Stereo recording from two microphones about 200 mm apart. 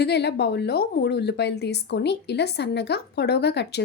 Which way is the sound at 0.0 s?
55° left (ahead or behind).